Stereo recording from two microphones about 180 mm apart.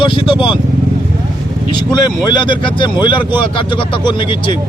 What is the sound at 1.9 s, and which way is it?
A man's voice, 20° left (ahead or behind).